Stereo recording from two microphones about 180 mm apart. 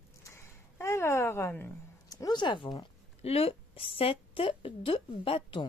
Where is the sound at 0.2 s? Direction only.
15° left (ahead or behind).